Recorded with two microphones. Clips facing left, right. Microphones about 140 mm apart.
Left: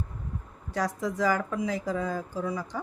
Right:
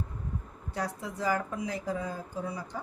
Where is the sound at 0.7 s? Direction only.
90° left.